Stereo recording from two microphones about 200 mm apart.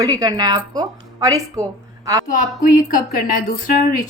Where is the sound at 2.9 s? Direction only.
45° left (ahead or behind).